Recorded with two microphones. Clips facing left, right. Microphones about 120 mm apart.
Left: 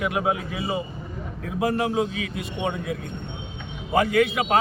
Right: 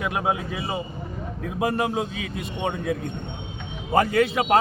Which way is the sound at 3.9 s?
35° right (ahead or behind).